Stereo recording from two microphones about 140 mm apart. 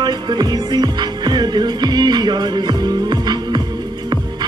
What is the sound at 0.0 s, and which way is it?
Music, 30° right (ahead or behind).